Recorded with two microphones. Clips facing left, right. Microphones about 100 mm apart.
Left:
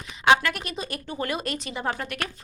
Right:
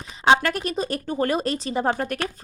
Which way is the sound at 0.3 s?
35° right (ahead or behind).